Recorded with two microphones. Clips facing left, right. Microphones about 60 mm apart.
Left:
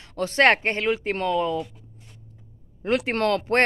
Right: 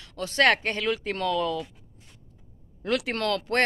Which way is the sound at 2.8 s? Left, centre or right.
Left.